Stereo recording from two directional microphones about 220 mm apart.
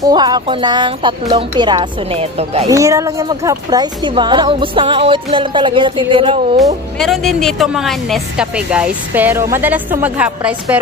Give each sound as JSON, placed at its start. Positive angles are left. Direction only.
{"t": 0.0, "sound": "speech", "side_deg": -20}
{"t": 2.6, "sound": "speech", "side_deg": -15}
{"t": 6.6, "sound": "speech", "side_deg": 0}